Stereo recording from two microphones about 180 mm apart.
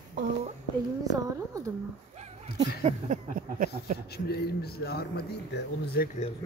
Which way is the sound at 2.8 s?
40° right (ahead or behind).